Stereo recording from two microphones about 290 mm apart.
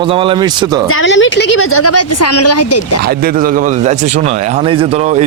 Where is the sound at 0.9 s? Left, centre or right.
Left.